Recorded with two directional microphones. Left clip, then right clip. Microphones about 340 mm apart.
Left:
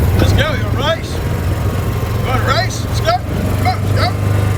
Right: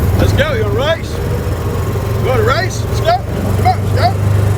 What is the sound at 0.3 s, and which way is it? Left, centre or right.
Speech, centre.